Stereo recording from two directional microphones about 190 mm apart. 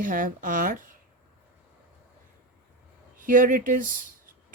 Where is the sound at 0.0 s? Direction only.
45° right (ahead or behind).